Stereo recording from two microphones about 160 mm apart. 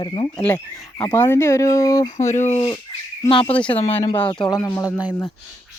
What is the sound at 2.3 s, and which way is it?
Speech, 45° left (ahead or behind).